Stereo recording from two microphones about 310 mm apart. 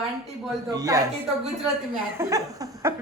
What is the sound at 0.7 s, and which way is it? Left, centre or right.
Speech, centre.